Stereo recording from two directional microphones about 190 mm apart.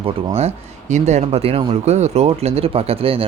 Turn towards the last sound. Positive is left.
turn(degrees=-30)  # may be behind; listen again after turning